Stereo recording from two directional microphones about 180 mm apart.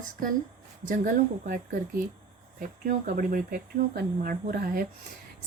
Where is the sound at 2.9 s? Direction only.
50° right (ahead or behind).